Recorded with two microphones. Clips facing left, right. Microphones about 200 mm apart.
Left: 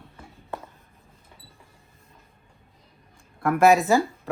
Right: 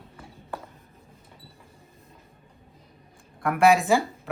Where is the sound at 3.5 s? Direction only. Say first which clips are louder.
Left 2 dB; 40° left (ahead or behind).